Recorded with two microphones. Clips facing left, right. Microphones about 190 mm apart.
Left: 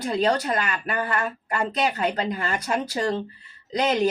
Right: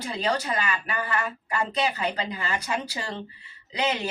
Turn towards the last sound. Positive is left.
turn(degrees=40)  # may be behind; listen again after turning